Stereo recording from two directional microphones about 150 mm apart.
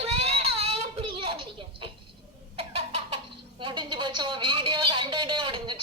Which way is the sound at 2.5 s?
40° right (ahead or behind).